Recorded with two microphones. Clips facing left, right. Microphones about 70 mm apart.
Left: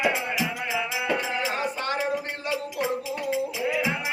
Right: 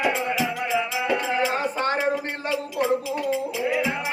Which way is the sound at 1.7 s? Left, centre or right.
Right.